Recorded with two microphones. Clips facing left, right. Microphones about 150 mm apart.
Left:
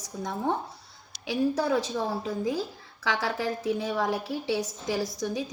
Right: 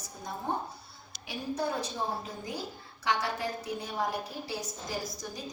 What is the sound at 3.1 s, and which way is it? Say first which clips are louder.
A woman's voice: left 3 dB; 90° left.